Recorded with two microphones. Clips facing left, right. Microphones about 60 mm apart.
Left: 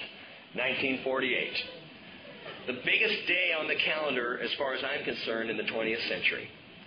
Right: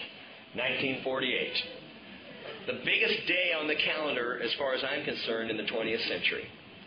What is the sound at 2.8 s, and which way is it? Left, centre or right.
A man's voice, left.